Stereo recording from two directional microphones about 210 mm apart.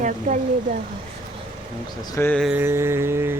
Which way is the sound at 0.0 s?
35° right (ahead or behind).